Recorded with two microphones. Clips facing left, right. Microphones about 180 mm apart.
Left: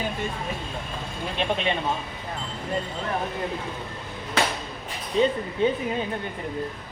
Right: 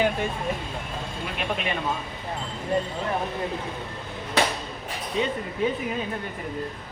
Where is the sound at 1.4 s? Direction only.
25° left (ahead or behind).